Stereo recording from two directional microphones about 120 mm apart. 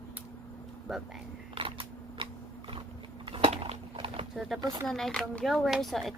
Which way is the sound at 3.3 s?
50° right (ahead or behind).